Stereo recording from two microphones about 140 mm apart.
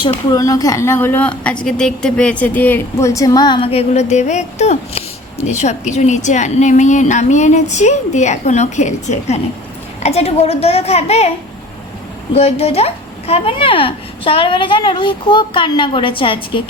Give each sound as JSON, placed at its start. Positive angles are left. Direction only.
{"t": 0.3, "sound": "a woman's voice", "side_deg": 25}
{"t": 12.3, "sound": "a woman's voice", "side_deg": 45}